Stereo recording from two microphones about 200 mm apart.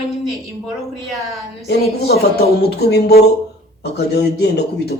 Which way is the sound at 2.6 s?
55° left (ahead or behind).